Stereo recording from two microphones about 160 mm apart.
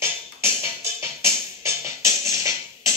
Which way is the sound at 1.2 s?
15° right (ahead or behind).